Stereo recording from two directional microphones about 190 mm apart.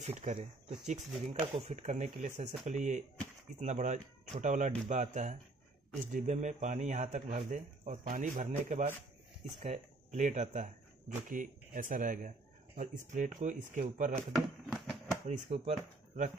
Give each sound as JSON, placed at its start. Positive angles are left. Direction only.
{"t": 0.0, "sound": "a man's voice", "side_deg": -35}
{"t": 15.2, "sound": "speech", "side_deg": -35}